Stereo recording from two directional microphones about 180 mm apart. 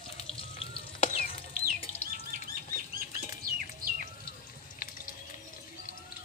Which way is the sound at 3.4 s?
50° right (ahead or behind).